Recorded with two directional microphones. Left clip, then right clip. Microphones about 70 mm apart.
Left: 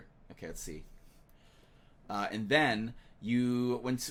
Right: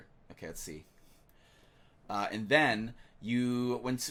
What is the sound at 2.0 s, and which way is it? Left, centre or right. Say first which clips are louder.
Speech: right 1 dB; right.